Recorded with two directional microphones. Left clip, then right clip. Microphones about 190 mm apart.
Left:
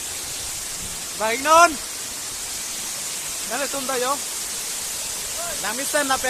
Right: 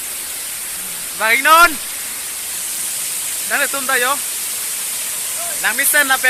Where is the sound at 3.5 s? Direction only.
Centre (ahead or behind).